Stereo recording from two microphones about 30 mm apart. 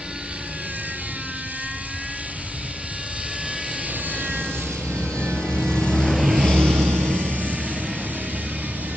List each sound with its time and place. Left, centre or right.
4.2 s vehicle: right
4.9 s vehicle: left
6.2 s vehicle: centre
6.6 s vehicle: right